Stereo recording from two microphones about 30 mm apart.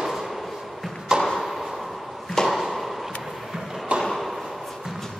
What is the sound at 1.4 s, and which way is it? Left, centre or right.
Chop, centre.